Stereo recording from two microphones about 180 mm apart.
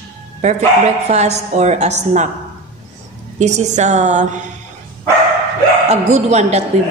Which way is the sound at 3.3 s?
40° right (ahead or behind).